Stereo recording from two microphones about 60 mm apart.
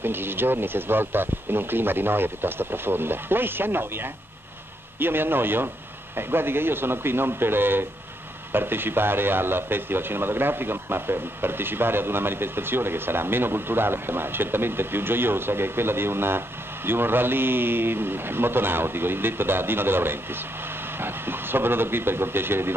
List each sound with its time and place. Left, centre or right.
0.0 s a man's voice: right